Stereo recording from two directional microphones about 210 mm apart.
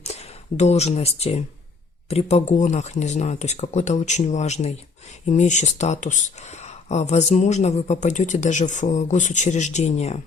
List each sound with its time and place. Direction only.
0.0 s speech: 30° left (ahead or behind)